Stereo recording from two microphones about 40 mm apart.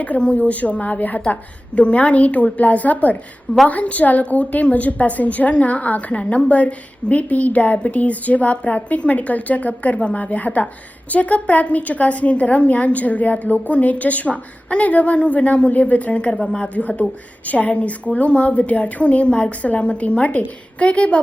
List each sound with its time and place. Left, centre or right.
0.2 s a woman's voice: left